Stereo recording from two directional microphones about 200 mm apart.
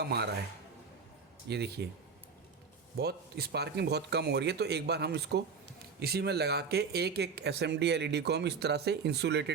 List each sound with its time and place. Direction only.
0.0 s speech: 55° right (ahead or behind)
1.5 s speech: 55° right (ahead or behind)
3.0 s speech: 55° right (ahead or behind)